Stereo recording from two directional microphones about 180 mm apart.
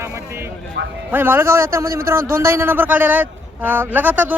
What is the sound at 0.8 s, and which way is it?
Speech, 70° right (ahead or behind).